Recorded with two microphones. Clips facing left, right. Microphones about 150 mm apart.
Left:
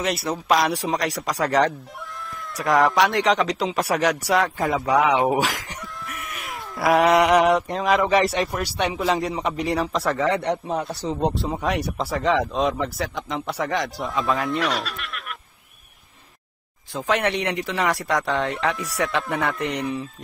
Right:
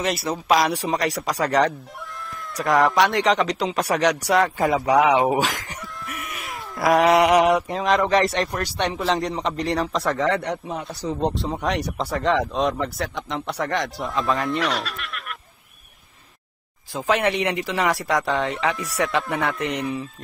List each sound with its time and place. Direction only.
0.0 s speech: centre (ahead or behind)
4.6 s speech: 15° right (ahead or behind)
5.3 s cat: centre (ahead or behind)
7.3 s speech: 10° right (ahead or behind)
10.4 s speech: 30° left (ahead or behind)
11.1 s speech: 5° left (ahead or behind)
16.9 s speech: 5° right (ahead or behind)